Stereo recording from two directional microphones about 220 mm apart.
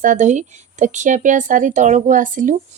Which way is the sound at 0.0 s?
35° right (ahead or behind).